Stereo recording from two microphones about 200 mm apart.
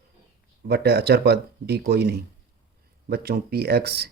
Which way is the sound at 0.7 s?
55° right (ahead or behind).